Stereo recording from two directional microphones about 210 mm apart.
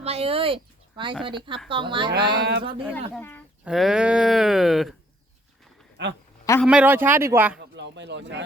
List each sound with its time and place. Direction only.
0.0 s a sound: 30° right (ahead or behind)
1.7 s a woman's voice: 25° right (ahead or behind)
2.1 s speech: 50° right (ahead or behind)
3.2 s speech: 10° left (ahead or behind)
3.6 s speech: centre (ahead or behind)
6.0 s a woman's voice: 55° right (ahead or behind)
6.4 s a sound: 15° left (ahead or behind)
6.7 s speech: 5° right (ahead or behind)
7.7 s speech: 55° right (ahead or behind)